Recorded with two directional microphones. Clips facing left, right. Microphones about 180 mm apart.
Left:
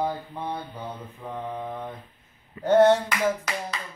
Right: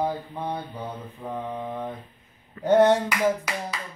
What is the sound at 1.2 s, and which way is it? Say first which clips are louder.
Mantra: right 1 dB; 5° right (ahead or behind).